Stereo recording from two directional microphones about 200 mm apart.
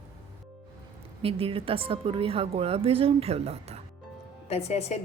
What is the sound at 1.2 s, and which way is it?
A woman's voice, 30° right (ahead or behind).